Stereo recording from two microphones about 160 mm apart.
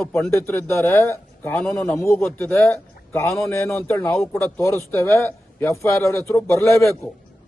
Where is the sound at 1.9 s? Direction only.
15° left (ahead or behind).